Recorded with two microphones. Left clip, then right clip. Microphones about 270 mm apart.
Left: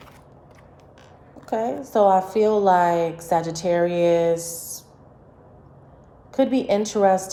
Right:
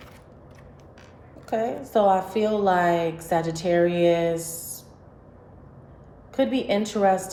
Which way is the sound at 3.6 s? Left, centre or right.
Left.